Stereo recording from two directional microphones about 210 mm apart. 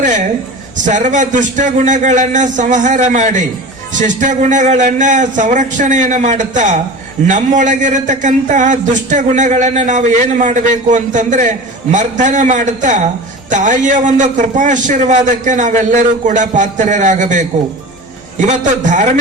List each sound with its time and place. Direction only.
0.9 s a man's voice: 35° right (ahead or behind)